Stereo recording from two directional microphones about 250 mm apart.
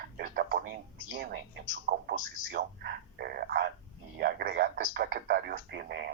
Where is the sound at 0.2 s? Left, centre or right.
Right.